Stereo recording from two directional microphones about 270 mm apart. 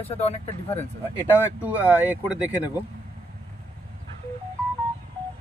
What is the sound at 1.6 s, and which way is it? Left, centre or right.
Speech, centre.